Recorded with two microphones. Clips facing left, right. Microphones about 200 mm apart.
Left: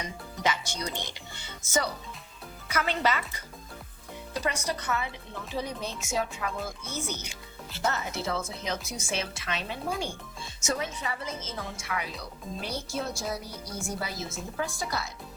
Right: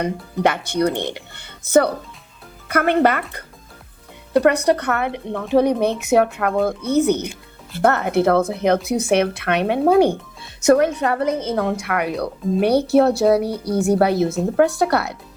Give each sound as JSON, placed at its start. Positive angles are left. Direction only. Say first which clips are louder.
{"t": 0.0, "sound": "a woman's voice", "louder": "right 12 dB", "side_deg": -60}